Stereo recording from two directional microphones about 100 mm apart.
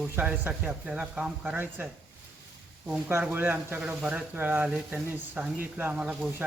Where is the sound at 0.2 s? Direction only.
15° right (ahead or behind).